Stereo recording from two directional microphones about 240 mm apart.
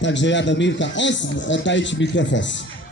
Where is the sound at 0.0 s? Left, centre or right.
Left.